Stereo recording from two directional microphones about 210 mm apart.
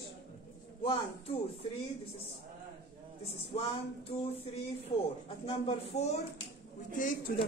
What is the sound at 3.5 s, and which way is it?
Speech, 30° left (ahead or behind).